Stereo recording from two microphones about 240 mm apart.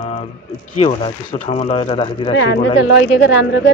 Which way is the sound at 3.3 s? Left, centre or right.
Left.